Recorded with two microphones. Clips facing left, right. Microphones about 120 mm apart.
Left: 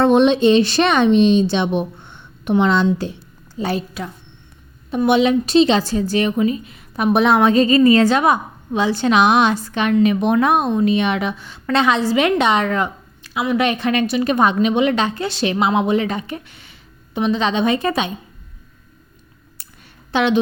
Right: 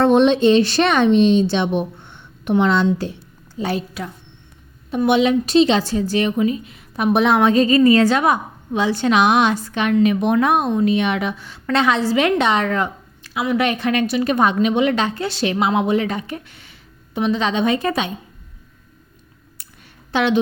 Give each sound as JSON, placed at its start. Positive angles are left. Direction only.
{"t": 0.0, "sound": "a woman's voice", "side_deg": 15}
{"t": 3.6, "sound": "a woman's voice", "side_deg": 35}
{"t": 5.0, "sound": "a woman's voice", "side_deg": 35}
{"t": 19.6, "sound": "a sound", "side_deg": 35}
{"t": 20.1, "sound": "a woman's voice", "side_deg": 20}